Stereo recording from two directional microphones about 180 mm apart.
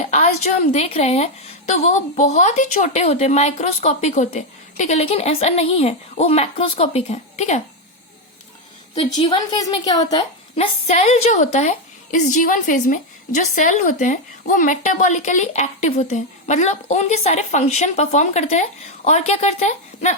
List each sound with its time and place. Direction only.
0.0 s a woman's voice: 40° left (ahead or behind)
9.0 s a woman's voice: 30° left (ahead or behind)